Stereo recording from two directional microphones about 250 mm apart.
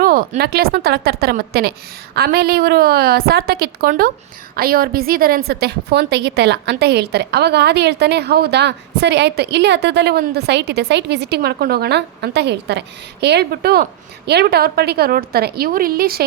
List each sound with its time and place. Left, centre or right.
0.0 s a woman's voice: right